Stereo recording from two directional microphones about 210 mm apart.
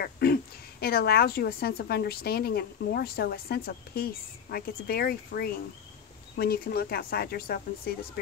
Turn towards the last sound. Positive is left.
turn(degrees=45)  # may be behind; listen again after turning